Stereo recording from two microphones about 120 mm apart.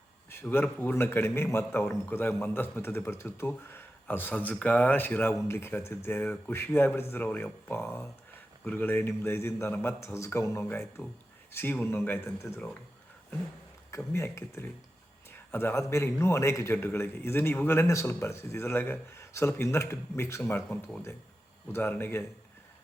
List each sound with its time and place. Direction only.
0.4 s a man's voice: 15° left (ahead or behind)
14.1 s a man's voice: 25° left (ahead or behind)